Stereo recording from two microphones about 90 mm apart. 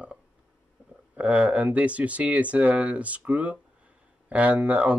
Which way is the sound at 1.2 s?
15° right (ahead or behind).